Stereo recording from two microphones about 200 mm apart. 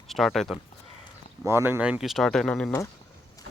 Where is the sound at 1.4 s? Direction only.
10° right (ahead or behind); by 2.7 s 5° left (ahead or behind).